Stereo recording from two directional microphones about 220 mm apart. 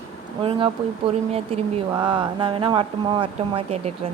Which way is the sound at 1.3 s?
25° right (ahead or behind).